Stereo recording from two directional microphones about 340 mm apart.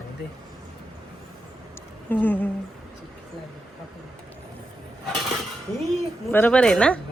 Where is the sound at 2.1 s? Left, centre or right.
Centre.